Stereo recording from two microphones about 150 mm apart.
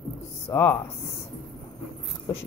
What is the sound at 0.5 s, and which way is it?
Speech, 20° left (ahead or behind).